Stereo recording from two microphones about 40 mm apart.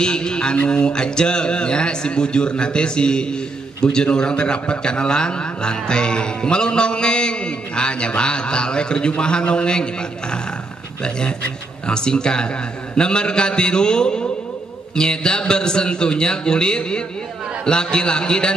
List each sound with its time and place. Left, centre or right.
0.0 s a man's voice: left